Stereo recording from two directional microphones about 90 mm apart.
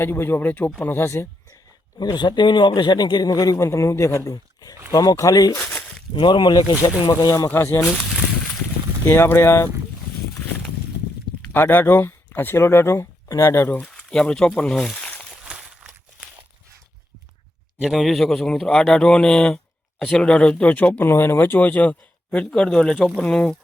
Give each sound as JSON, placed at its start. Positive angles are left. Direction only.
{"t": 0.0, "sound": "speech", "side_deg": 25}
{"t": 2.0, "sound": "speech", "side_deg": 55}
{"t": 5.5, "sound": "a sound", "side_deg": 0}
{"t": 6.1, "sound": "speech", "side_deg": 60}
{"t": 7.1, "sound": "speech", "side_deg": 40}
{"t": 7.4, "sound": "speech", "side_deg": 25}
{"t": 8.0, "sound": "a sound", "side_deg": 0}
{"t": 9.0, "sound": "speech", "side_deg": 25}
{"t": 11.5, "sound": "speech", "side_deg": 20}
{"t": 13.7, "sound": "speech", "side_deg": 15}
{"t": 15.3, "sound": "a sound", "side_deg": -10}
{"t": 17.7, "sound": "speech", "side_deg": -5}